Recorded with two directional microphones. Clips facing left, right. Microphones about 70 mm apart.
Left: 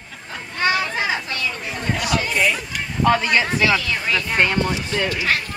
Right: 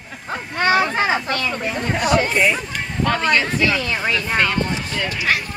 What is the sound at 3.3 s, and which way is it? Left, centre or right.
Speech, left.